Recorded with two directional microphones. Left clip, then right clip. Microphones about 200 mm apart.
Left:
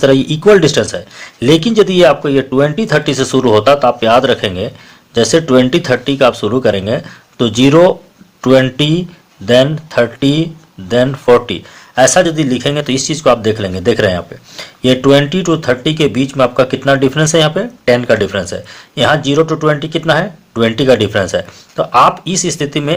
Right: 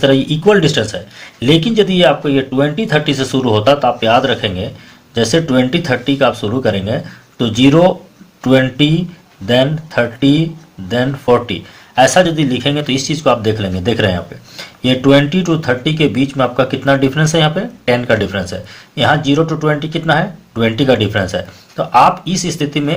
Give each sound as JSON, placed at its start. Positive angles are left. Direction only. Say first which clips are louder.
{"t": 0.0, "sound": "speech", "louder": "left 2 dB", "side_deg": 40}